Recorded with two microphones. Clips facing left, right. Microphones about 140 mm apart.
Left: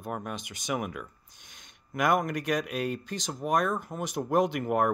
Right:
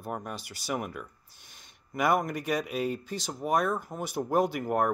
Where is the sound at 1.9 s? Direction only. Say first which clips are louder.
Even; 5° right (ahead or behind).